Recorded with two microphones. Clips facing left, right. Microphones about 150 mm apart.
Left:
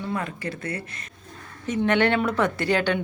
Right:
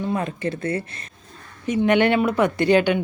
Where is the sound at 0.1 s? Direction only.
25° right (ahead or behind).